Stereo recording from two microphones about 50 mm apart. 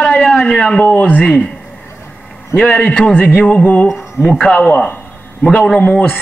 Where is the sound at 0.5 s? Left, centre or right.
Left.